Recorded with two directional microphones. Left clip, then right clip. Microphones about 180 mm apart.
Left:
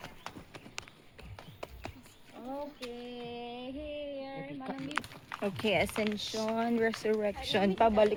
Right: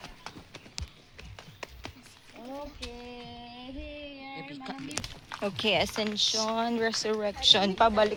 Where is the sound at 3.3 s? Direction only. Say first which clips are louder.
Left 3 dB; 50° left (ahead or behind).